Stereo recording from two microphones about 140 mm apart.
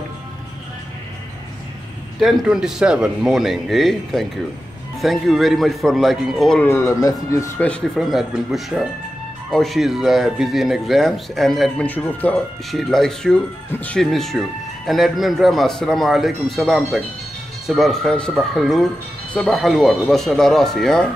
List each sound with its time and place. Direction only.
2.1 s speech: centre (ahead or behind)
6.6 s speech: 20° left (ahead or behind)
8.0 s speech: centre (ahead or behind)
11.9 s speech: 10° left (ahead or behind)